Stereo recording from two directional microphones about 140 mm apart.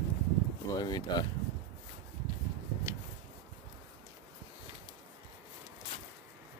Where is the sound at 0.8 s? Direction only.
30° left (ahead or behind).